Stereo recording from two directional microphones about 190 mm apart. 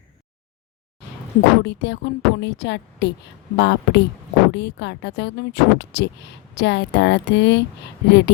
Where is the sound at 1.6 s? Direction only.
65° left (ahead or behind).